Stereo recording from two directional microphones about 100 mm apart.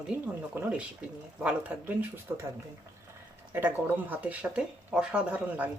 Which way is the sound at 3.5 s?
20° right (ahead or behind).